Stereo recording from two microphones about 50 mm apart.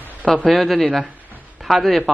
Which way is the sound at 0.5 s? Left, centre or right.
Centre.